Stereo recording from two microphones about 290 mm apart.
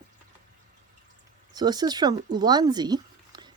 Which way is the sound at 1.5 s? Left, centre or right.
Centre.